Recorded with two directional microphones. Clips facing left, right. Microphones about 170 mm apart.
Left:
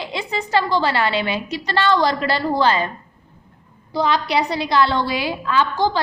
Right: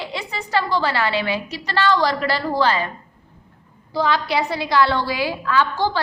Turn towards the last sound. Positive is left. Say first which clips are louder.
# left 1 dB
turn(degrees=20)  # may be behind; listen again after turning